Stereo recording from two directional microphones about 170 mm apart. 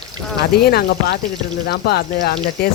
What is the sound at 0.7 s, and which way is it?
Speech, 65° left (ahead or behind).